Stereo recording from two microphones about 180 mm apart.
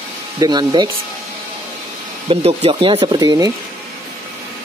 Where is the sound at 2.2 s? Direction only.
35° right (ahead or behind).